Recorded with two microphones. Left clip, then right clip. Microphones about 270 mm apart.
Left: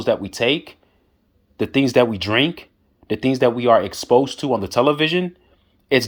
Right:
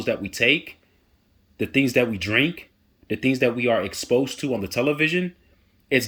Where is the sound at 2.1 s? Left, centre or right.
Centre.